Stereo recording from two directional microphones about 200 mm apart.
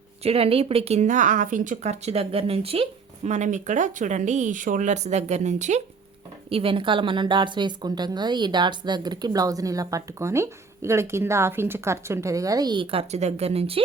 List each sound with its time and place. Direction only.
0.2 s a woman's voice: 30° right (ahead or behind)